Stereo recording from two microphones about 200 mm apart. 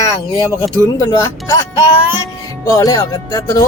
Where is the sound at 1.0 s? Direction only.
15° left (ahead or behind).